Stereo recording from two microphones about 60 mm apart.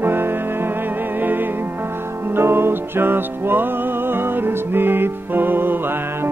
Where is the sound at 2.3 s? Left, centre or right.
Right.